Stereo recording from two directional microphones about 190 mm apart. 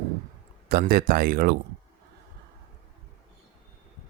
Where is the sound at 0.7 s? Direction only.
55° right (ahead or behind).